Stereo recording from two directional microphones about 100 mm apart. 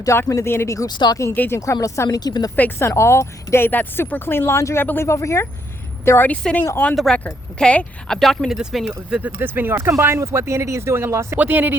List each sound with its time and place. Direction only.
0.0 s speech: 30° left (ahead or behind)
0.9 s speech: 45° left (ahead or behind)
1.2 s speech: 25° left (ahead or behind)
2.0 s speech: 45° left (ahead or behind)
2.6 s speech: 20° left (ahead or behind); by 9.3 s 10° right (ahead or behind)
9.4 s speech: 20° right (ahead or behind)